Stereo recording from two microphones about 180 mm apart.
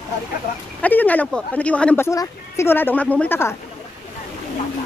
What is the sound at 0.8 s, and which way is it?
Speech, 10° left (ahead or behind).